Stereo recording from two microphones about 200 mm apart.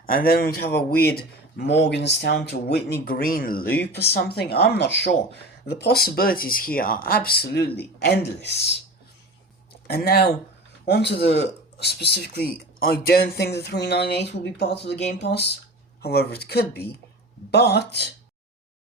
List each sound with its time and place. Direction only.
0.0 s speech: 45° left (ahead or behind)
3.0 s speech: 45° left (ahead or behind)
9.8 s speech: 50° left (ahead or behind)